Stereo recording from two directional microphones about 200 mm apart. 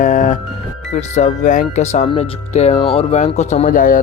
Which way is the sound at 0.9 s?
35° left (ahead or behind).